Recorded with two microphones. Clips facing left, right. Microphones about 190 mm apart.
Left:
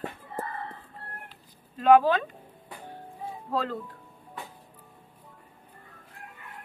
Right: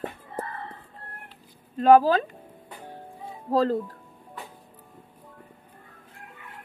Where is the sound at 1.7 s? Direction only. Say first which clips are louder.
Right 2 dB; 40° right (ahead or behind).